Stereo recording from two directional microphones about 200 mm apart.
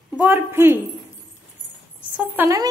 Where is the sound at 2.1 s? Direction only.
10° right (ahead or behind).